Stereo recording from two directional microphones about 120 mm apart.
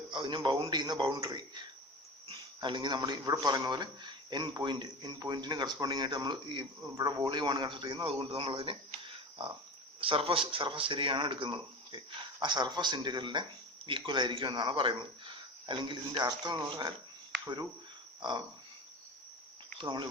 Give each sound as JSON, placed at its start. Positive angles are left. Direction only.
{"t": 0.1, "sound": "a man's voice", "side_deg": -45}
{"t": 18.2, "sound": "a sound", "side_deg": -40}
{"t": 19.8, "sound": "speech", "side_deg": -40}